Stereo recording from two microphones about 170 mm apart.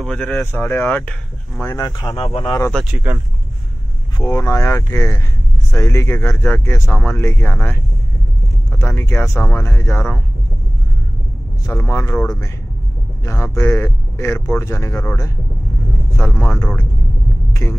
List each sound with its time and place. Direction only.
0.0 s speech: 5° left (ahead or behind); by 2.7 s 25° left (ahead or behind)
2.7 s speech: 5° right (ahead or behind)
4.2 s speech: 20° left (ahead or behind)
11.6 s speech: 15° left (ahead or behind)
17.5 s rumble: 15° left (ahead or behind)